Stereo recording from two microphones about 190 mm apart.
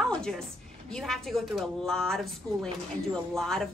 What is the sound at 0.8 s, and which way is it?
A woman's voice, 5° left (ahead or behind).